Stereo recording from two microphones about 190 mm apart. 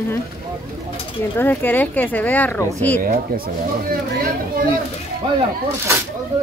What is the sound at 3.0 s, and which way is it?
Speech, 50° right (ahead or behind).